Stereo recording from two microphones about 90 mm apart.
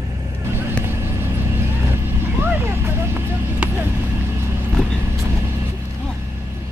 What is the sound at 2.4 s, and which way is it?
Vehicle, 25° right (ahead or behind).